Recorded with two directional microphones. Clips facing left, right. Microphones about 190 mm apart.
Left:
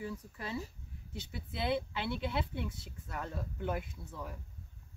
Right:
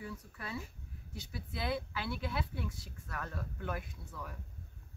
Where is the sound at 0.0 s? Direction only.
25° left (ahead or behind).